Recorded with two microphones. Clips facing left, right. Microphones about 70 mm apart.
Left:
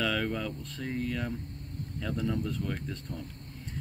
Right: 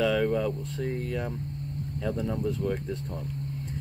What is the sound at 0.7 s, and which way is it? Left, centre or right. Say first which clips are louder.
Speech: right 2 dB; centre.